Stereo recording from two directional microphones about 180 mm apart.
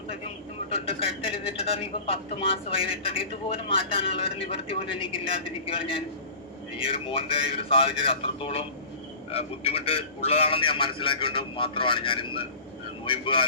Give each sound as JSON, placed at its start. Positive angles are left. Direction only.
{"t": 0.7, "sound": "a man's voice", "side_deg": 30}